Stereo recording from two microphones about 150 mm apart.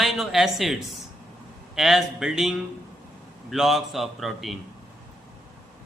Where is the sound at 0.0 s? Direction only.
Centre (ahead or behind).